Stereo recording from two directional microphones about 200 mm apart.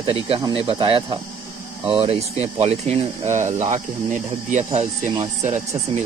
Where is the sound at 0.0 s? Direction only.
25° right (ahead or behind).